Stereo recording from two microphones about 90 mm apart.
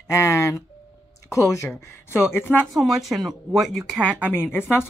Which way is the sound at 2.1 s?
25° left (ahead or behind).